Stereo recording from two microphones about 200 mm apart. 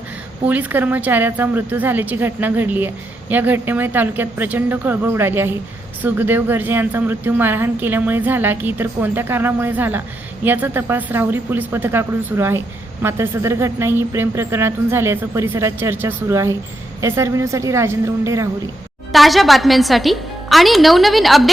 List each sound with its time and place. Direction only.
0.4 s a woman's voice: 10° right (ahead or behind)
19.1 s a woman's voice: centre (ahead or behind)